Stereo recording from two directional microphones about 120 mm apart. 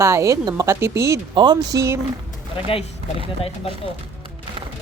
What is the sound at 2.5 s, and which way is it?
Speech, 50° left (ahead or behind).